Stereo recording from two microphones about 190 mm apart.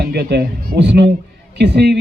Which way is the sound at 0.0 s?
60° right (ahead or behind).